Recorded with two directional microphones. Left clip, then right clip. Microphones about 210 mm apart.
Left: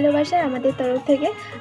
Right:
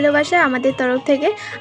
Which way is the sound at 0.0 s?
45° right (ahead or behind).